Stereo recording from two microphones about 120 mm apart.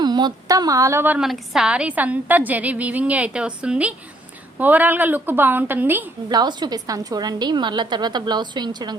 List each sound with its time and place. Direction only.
0.0 s a woman's voice: 35° right (ahead or behind); by 1.2 s 20° right (ahead or behind)
1.2 s a woman's voice: 5° right (ahead or behind)
6.2 s a woman's voice: 35° right (ahead or behind)